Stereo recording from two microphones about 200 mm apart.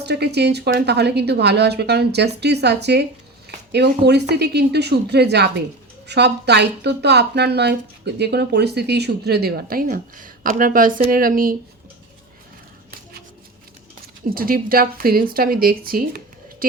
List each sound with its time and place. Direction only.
0.0 s speech: 55° right (ahead or behind)
14.3 s speech: 45° right (ahead or behind)